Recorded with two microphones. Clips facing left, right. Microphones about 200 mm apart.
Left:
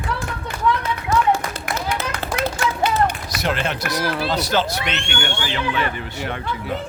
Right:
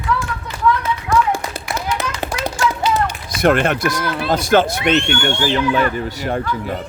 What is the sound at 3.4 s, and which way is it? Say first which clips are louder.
Speech: right 9 dB; 55° right (ahead or behind).